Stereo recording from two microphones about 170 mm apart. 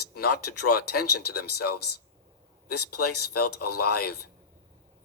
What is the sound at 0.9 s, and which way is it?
Speech, 65° left (ahead or behind).